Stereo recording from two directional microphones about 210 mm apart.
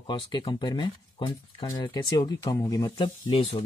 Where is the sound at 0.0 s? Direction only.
20° left (ahead or behind).